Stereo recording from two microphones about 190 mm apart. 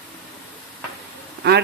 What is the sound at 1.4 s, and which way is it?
Speech, 60° right (ahead or behind).